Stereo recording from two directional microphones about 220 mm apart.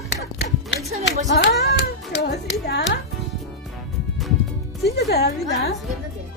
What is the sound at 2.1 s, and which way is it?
Music, 50° left (ahead or behind).